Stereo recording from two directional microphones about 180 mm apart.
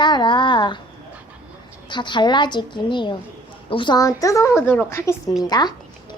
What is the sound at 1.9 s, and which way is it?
A child's voice, 25° left (ahead or behind).